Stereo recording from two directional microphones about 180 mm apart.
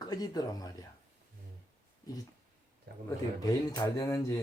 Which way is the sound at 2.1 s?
20° left (ahead or behind).